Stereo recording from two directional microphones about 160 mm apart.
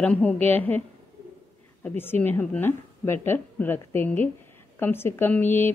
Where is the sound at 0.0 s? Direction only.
10° left (ahead or behind).